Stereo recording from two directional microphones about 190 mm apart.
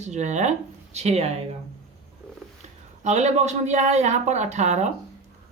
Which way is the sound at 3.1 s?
35° right (ahead or behind).